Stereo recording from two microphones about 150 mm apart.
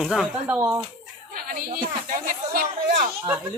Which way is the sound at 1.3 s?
70° right (ahead or behind).